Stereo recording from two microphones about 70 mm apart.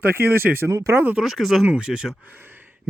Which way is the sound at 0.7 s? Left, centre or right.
Right.